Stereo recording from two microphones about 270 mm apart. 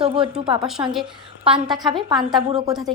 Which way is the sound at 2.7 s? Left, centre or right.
Centre.